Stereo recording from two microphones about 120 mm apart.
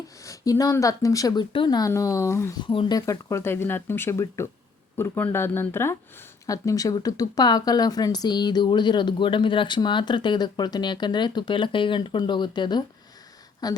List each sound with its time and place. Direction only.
0.3 s speech: 30° left (ahead or behind)
1.9 s speech: 25° left (ahead or behind)
2.6 s speech: 40° left (ahead or behind)
3.1 s speech: 25° left (ahead or behind)